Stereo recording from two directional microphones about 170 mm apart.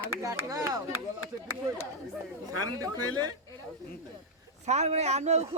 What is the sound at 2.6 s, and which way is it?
Speech, 20° right (ahead or behind).